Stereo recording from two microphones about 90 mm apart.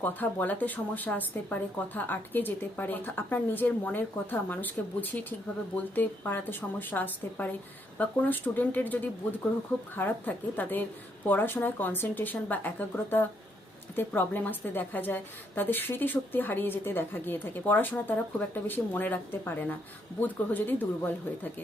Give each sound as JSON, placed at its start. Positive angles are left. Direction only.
{"t": 0.0, "sound": "a woman's voice", "side_deg": 20}